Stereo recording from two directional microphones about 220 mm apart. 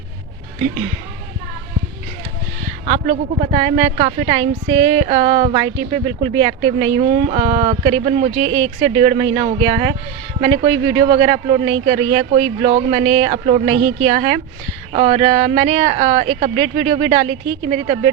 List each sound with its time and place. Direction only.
2.8 s a woman's voice: 30° right (ahead or behind)